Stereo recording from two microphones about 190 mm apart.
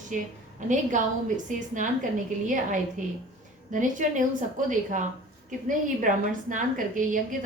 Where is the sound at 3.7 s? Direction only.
40° right (ahead or behind).